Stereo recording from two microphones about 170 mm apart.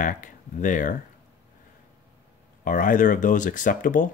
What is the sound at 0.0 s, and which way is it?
Speech, 50° left (ahead or behind).